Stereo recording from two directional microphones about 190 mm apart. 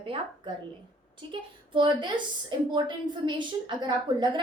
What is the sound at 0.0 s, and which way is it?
A woman's voice, 25° right (ahead or behind).